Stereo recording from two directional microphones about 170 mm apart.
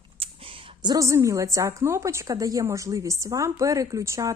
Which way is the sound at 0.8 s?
20° right (ahead or behind).